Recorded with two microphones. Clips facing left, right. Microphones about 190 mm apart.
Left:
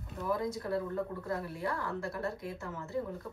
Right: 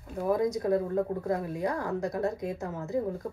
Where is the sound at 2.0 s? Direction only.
40° right (ahead or behind).